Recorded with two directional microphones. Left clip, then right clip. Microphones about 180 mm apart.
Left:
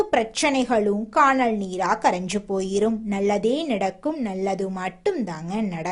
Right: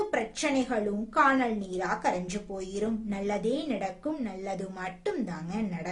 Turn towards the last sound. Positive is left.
turn(degrees=40)  # may be behind; listen again after turning